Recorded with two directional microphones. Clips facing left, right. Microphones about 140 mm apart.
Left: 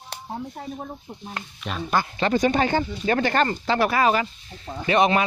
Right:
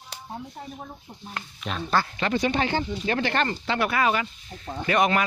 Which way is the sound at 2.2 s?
40° left (ahead or behind).